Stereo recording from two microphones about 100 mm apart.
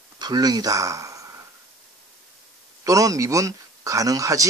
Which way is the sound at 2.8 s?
35° right (ahead or behind).